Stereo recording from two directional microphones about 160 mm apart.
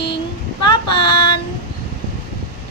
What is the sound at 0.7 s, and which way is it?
Female singing, 30° left (ahead or behind).